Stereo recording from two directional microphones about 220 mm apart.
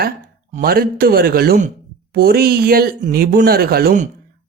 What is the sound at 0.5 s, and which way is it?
Speech, 40° right (ahead or behind).